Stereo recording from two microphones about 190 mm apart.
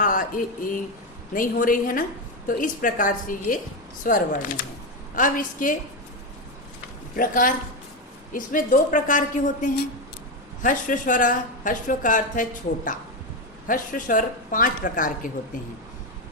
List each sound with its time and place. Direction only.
0.0 s speech: 45° left (ahead or behind)
7.2 s speech: 45° left (ahead or behind)